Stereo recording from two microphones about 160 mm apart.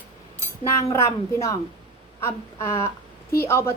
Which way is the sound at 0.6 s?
20° left (ahead or behind).